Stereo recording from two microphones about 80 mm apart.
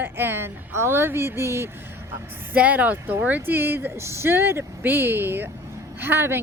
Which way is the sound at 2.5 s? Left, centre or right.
Right.